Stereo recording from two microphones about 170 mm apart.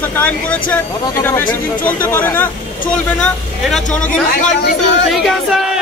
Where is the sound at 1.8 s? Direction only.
10° left (ahead or behind).